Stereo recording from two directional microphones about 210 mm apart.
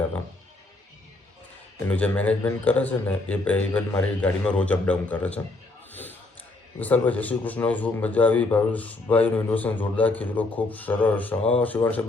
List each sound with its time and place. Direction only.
1.9 s a man's voice: 5° left (ahead or behind)
5.9 s a sound: 10° left (ahead or behind)
6.7 s a man's voice: 5° left (ahead or behind)